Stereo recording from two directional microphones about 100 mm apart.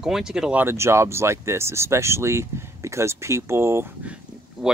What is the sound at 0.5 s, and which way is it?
Speech, 25° right (ahead or behind).